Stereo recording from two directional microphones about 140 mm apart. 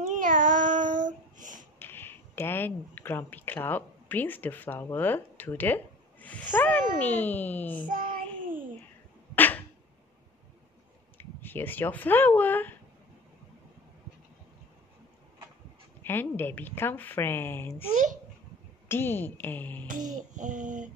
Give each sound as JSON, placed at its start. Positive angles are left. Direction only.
{"t": 0.0, "sound": "child singing", "side_deg": -70}
{"t": 1.8, "sound": "speech", "side_deg": 15}
{"t": 7.9, "sound": "child singing", "side_deg": -75}
{"t": 9.3, "sound": "a sound", "side_deg": 15}
{"t": 11.1, "sound": "speech", "side_deg": 15}
{"t": 16.0, "sound": "a woman's voice", "side_deg": 15}
{"t": 17.9, "sound": "a child's voice", "side_deg": -65}
{"t": 18.9, "sound": "a woman's voice", "side_deg": 15}
{"t": 20.3, "sound": "child singing", "side_deg": -65}